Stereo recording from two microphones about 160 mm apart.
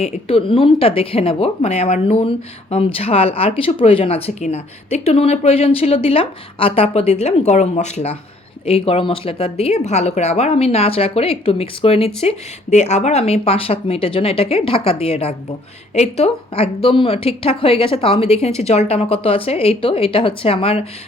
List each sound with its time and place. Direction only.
0.0 s speech: 35° left (ahead or behind)